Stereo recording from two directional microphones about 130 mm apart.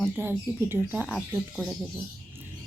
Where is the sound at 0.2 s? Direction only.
15° right (ahead or behind).